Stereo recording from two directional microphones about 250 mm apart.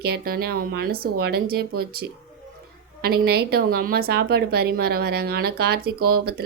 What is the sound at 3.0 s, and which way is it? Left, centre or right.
Speech, right.